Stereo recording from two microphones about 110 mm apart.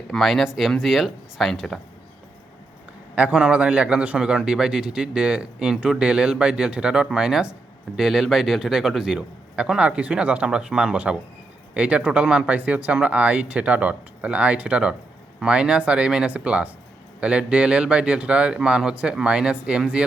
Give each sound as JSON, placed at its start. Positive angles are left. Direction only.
{"t": 0.1, "sound": "speech", "side_deg": 0}
{"t": 3.2, "sound": "a man's voice", "side_deg": -10}